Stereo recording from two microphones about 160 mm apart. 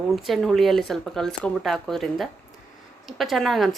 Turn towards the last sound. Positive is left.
turn(degrees=0)  # may be behind; listen again after turning